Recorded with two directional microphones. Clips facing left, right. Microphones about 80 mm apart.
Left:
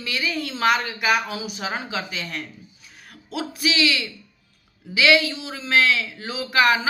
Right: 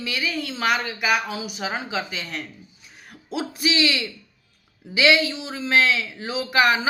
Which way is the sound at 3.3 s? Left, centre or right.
Right.